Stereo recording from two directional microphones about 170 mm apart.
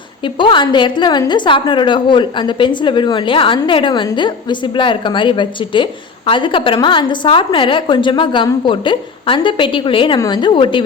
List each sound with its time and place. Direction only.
0.3 s a woman's voice: 30° left (ahead or behind)